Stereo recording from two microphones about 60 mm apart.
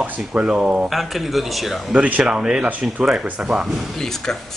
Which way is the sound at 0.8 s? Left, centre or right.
Centre.